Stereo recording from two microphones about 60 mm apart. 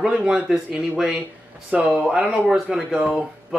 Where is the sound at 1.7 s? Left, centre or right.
Right.